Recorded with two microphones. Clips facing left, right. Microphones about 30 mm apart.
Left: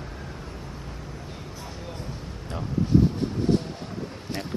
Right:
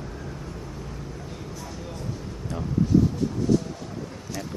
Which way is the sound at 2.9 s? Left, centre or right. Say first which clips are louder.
Left 1 dB; left.